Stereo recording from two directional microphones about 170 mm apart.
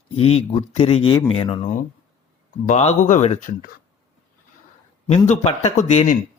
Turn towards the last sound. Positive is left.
turn(degrees=40)  # may be behind; listen again after turning